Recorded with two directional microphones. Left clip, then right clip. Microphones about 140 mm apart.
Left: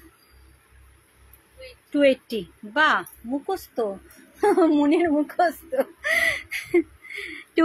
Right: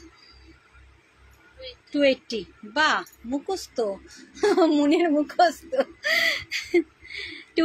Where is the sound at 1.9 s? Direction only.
20° left (ahead or behind).